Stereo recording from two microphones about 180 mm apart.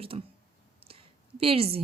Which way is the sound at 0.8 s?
60° right (ahead or behind).